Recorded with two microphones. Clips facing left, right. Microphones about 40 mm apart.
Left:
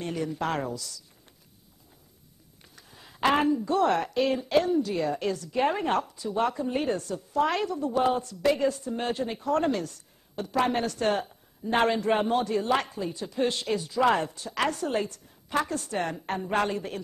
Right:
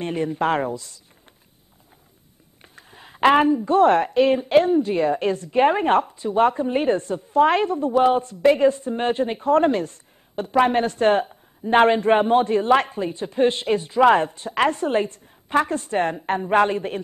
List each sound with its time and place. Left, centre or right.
0.0 s speech: right
2.6 s speech: right